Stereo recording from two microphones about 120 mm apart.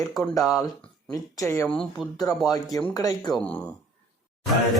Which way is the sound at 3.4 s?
15° left (ahead or behind).